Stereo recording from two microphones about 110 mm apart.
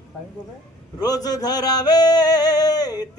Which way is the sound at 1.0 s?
35° left (ahead or behind).